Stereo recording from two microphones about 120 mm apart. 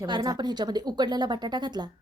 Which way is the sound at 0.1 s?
35° right (ahead or behind).